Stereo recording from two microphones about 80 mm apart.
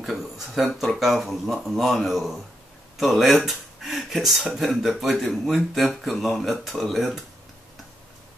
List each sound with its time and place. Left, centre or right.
0.0 s speech: centre